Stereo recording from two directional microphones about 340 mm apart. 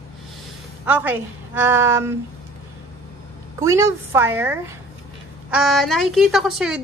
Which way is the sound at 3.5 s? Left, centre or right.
Centre.